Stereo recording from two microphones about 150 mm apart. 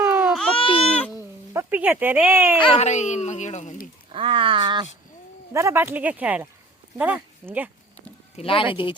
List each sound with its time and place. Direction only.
0.0 s baby cry: 15° right (ahead or behind)
0.3 s baby cry: centre (ahead or behind)
0.6 s goat: 35° left (ahead or behind)
1.2 s speech: 15° right (ahead or behind)
2.6 s speech: 40° left (ahead or behind)
4.1 s speech: 35° right (ahead or behind)
5.5 s speech: 15° right (ahead or behind)
8.4 s speech: 35° left (ahead or behind)